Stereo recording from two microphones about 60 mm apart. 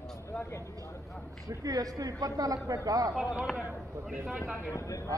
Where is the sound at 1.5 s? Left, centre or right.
Right.